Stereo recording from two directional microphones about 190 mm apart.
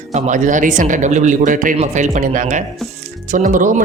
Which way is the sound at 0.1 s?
40° right (ahead or behind).